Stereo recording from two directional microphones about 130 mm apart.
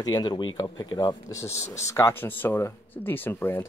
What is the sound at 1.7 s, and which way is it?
Speech, 20° left (ahead or behind).